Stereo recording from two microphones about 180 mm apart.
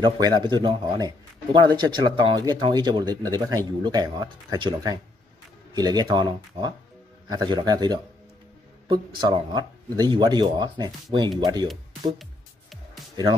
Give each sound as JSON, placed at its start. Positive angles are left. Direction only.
{"t": 0.0, "sound": "speech", "side_deg": -25}